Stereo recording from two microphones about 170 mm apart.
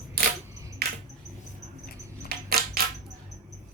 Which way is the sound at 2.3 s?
65° right (ahead or behind).